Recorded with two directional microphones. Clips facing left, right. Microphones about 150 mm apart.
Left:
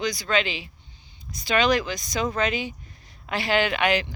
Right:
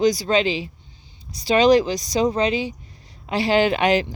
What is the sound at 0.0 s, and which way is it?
Speech, 40° right (ahead or behind).